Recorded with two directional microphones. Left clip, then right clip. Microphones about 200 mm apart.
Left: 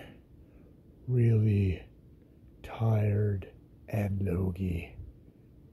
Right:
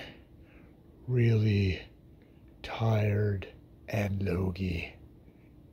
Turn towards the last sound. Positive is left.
turn(degrees=5)  # may be behind; listen again after turning